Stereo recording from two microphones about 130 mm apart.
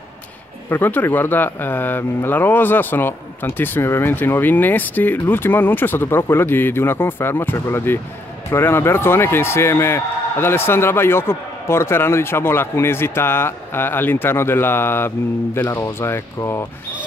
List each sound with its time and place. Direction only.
0.7 s speech: 15° left (ahead or behind)